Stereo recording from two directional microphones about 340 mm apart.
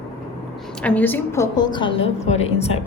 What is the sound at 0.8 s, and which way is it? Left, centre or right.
A woman's voice, centre.